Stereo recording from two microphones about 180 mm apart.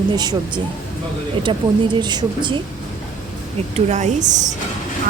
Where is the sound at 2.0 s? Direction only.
25° right (ahead or behind).